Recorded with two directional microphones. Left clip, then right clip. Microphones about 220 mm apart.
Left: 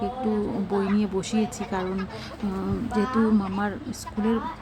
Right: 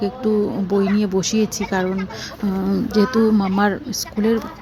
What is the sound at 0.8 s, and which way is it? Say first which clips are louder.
Speech: right 8 dB; 15° right (ahead or behind).